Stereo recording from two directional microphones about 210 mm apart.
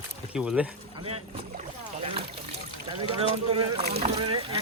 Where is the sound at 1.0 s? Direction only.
30° right (ahead or behind).